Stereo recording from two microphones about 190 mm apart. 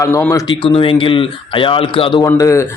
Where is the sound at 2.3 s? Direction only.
15° left (ahead or behind).